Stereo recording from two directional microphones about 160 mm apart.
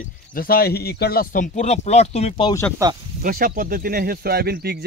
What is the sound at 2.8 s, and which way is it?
Speech, 20° right (ahead or behind).